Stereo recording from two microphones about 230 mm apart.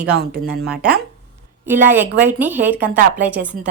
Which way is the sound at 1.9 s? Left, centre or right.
Centre.